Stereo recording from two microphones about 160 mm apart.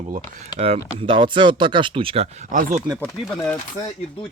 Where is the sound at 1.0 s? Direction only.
30° right (ahead or behind).